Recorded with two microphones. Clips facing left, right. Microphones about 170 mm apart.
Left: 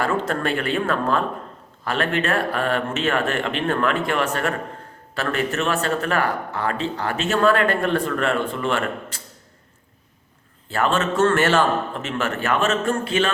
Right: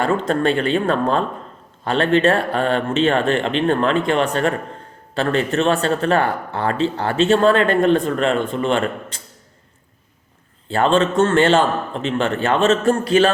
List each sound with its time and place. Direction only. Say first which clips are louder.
0.0 s speech: right 5 dB; 25° right (ahead or behind)
10.7 s speech: right 5 dB; 30° right (ahead or behind)